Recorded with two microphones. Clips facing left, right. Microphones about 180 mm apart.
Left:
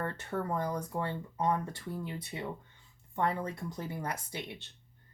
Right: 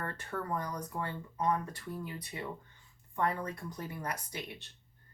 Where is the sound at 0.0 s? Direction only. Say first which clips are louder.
Left 4 dB; 25° left (ahead or behind).